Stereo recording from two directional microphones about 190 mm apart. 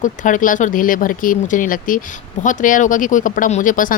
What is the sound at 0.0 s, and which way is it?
Speech, 45° left (ahead or behind).